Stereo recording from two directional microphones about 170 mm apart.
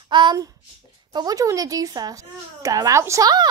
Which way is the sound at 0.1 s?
25° right (ahead or behind).